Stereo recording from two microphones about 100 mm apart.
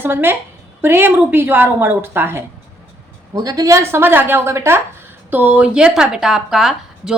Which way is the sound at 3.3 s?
35° right (ahead or behind).